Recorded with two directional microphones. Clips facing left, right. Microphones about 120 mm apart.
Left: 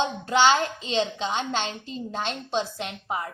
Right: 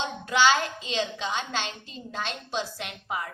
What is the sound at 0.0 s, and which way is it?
A woman's voice, 30° left (ahead or behind).